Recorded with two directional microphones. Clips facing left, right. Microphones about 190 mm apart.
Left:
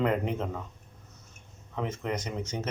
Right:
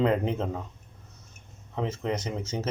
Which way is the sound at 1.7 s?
25° right (ahead or behind).